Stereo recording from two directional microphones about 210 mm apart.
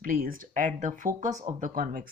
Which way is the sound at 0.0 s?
40° right (ahead or behind).